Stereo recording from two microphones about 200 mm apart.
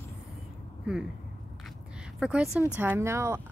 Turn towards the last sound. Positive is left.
turn(degrees=-15)  # may be behind; listen again after turning